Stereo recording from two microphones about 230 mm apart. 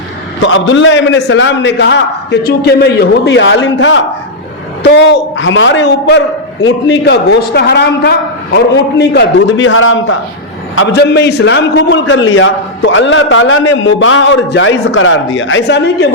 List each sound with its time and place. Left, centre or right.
0.4 s a man's voice: left
10.8 s a man's voice: left